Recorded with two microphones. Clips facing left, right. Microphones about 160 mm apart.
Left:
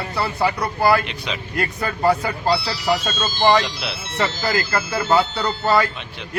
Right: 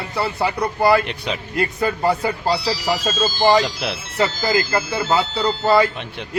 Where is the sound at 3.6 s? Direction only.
50° right (ahead or behind).